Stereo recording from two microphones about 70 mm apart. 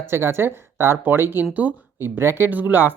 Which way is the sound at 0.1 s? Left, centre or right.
Right.